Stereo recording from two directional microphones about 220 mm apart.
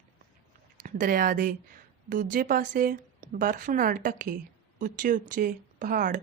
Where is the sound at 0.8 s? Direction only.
40° right (ahead or behind).